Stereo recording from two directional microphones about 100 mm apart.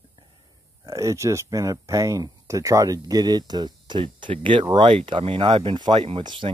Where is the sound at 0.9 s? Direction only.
30° right (ahead or behind).